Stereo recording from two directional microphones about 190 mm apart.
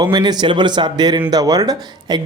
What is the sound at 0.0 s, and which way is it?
Speech, 20° right (ahead or behind).